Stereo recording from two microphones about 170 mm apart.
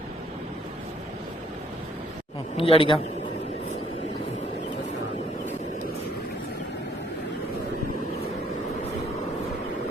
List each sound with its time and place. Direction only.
2.6 s a man's voice: 30° left (ahead or behind)